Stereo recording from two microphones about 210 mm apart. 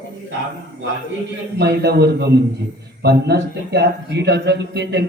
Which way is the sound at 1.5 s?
50° right (ahead or behind).